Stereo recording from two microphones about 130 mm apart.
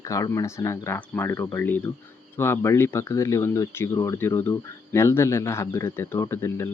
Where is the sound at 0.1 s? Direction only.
25° left (ahead or behind).